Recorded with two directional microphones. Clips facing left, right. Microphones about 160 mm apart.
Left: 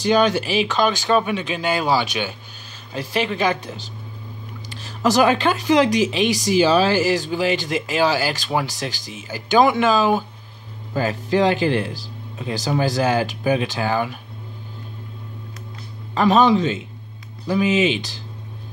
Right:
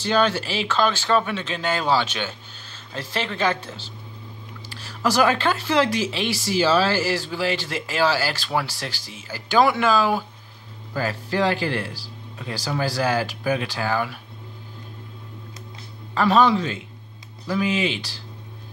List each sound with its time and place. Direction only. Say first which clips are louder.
0.0 s speech: left 4 dB; 15° left (ahead or behind)
16.2 s speech: left 3 dB; 20° left (ahead or behind)